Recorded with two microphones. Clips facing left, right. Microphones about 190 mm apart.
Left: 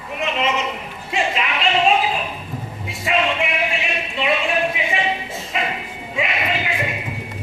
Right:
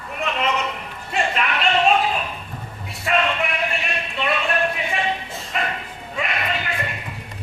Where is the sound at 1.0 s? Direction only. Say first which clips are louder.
Left 1 dB; centre (ahead or behind).